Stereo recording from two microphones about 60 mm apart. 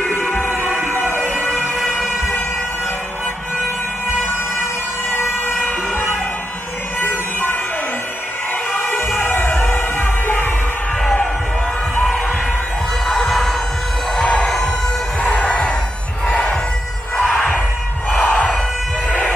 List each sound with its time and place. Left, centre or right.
1.8 s emergency vehicle: centre
5.1 s emergency vehicle: left
8.9 s music: left
9.5 s music: centre
13.2 s music: centre
14.1 s music: centre
16.3 s a sound: left
17.2 s music: centre